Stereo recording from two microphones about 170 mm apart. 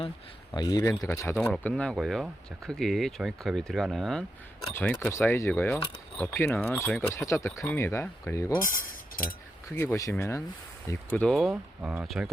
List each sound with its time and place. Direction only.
0.5 s speech: 20° left (ahead or behind); by 4.2 s centre (ahead or behind)
4.7 s speech: 10° left (ahead or behind)
9.7 s speech: 15° left (ahead or behind); by 12.3 s 5° right (ahead or behind)